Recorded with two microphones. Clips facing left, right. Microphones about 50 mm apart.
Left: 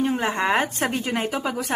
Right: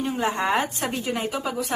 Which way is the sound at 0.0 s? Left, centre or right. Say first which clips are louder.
Left 2 dB; left.